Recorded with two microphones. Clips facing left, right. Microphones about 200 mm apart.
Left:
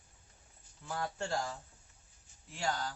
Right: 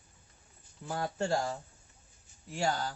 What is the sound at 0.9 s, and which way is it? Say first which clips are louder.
Speech: right 5 dB; 30° right (ahead or behind).